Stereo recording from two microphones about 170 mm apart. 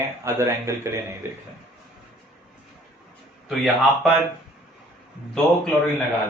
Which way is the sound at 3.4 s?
Centre (ahead or behind).